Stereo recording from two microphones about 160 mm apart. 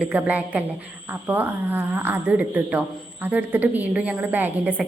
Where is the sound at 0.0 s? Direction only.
10° right (ahead or behind).